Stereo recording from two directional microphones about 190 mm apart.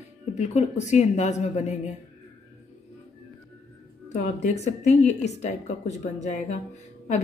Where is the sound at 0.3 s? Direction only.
35° left (ahead or behind).